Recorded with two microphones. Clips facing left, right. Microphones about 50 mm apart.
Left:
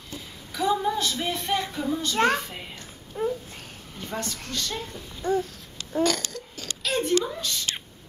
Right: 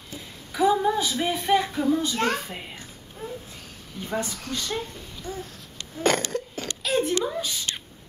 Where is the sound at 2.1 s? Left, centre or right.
Left.